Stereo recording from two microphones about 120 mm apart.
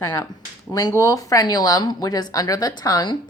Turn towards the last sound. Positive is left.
turn(degrees=35)  # may be behind; listen again after turning